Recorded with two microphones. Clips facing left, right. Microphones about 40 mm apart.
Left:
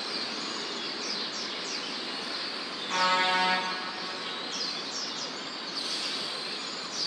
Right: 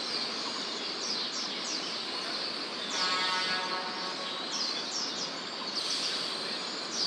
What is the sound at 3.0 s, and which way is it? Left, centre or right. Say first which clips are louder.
Vehicle: left 7 dB; left.